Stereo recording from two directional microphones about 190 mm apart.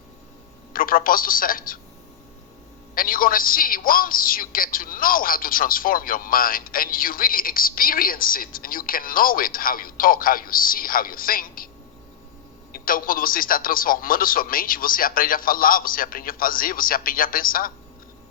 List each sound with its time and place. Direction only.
0.7 s a man's voice: 50° left (ahead or behind)
2.9 s a man's voice: 50° left (ahead or behind)
12.7 s a man's voice: 50° left (ahead or behind)